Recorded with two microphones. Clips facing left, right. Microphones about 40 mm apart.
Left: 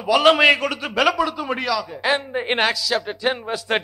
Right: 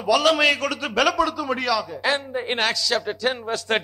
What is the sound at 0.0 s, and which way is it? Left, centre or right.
A man's voice, left.